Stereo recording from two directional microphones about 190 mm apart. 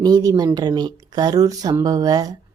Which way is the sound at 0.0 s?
20° right (ahead or behind).